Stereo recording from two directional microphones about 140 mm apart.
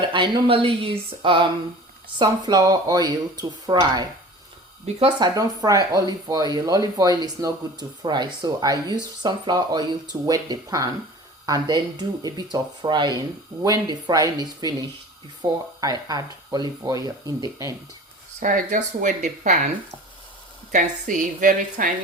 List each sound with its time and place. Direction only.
0.1 s speech: 35° right (ahead or behind)
18.3 s speech: 65° right (ahead or behind)
20.7 s a woman's voice: 65° right (ahead or behind)